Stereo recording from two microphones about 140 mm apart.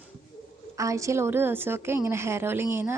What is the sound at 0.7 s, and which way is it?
A woman's voice, 20° right (ahead or behind).